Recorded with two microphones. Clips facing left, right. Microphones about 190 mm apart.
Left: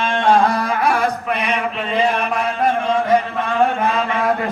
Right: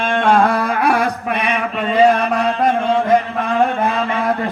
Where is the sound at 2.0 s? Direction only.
35° right (ahead or behind).